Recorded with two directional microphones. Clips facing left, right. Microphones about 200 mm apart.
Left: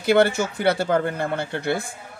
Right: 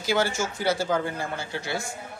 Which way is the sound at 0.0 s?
60° left (ahead or behind).